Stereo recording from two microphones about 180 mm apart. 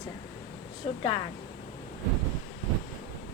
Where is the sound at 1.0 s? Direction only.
30° left (ahead or behind).